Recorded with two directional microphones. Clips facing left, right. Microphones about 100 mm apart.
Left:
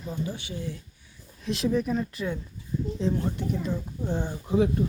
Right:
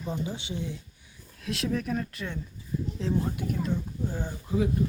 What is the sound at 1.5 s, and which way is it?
Speech, centre (ahead or behind).